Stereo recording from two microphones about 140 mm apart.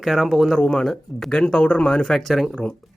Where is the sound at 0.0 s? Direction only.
Centre (ahead or behind).